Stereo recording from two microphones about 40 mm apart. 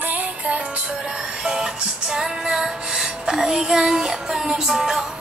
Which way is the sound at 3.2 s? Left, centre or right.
Centre.